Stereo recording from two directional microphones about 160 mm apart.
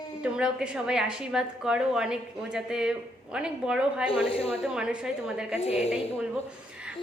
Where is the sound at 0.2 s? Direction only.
5° right (ahead or behind).